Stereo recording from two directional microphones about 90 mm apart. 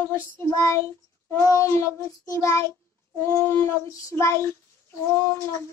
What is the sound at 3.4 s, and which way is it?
Speech, 25° left (ahead or behind).